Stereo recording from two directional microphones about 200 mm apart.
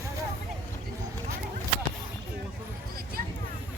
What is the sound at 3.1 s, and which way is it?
Vehicle, 50° right (ahead or behind).